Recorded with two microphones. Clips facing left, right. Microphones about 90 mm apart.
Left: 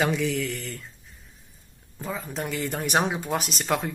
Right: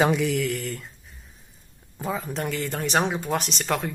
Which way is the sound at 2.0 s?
5° right (ahead or behind).